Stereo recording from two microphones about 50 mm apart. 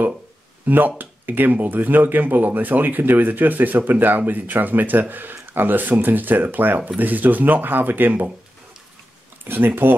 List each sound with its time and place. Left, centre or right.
0.7 s speech: right
9.5 s speech: right